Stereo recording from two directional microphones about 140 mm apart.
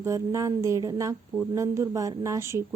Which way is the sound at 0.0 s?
20° right (ahead or behind).